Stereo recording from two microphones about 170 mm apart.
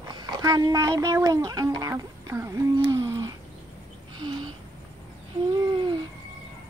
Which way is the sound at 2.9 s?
20° right (ahead or behind).